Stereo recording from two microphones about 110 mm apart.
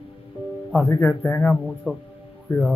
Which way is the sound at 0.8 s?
20° left (ahead or behind).